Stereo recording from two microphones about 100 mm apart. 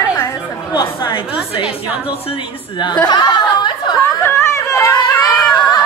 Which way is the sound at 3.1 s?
45° left (ahead or behind).